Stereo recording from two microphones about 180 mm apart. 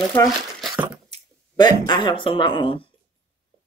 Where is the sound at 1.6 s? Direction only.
25° left (ahead or behind).